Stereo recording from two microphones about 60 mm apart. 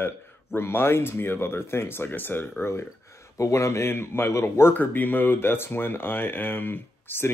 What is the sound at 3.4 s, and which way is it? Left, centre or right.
Speech, left.